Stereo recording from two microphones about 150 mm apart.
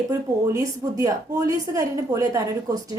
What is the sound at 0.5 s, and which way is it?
A woman's voice, 25° right (ahead or behind).